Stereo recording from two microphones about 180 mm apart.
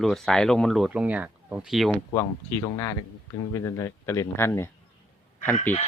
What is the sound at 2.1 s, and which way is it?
Speech, 20° left (ahead or behind).